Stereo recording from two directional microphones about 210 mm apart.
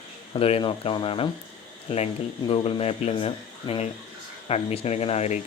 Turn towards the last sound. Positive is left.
turn(degrees=30)  # may be behind; listen again after turning